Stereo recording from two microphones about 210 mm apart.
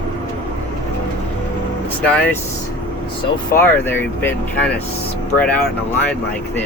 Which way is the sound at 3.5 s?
10° left (ahead or behind).